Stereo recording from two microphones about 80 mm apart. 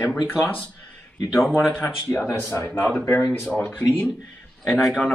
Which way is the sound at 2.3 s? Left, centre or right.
Left.